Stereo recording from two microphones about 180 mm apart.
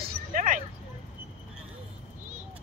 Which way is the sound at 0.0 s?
45° right (ahead or behind).